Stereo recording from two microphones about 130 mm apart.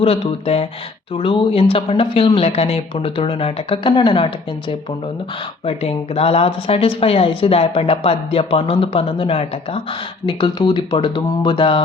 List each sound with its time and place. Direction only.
0.0 s a woman's voice: 50° left (ahead or behind)
5.6 s a woman's voice: 50° left (ahead or behind)
10.2 s speech: 30° left (ahead or behind)